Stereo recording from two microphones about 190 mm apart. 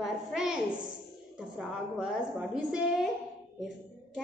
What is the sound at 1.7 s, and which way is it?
A woman's voice, 5° right (ahead or behind).